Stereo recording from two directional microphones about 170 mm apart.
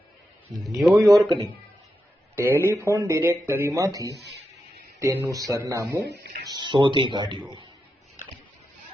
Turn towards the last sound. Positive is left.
turn(degrees=-25)  # may be behind; listen again after turning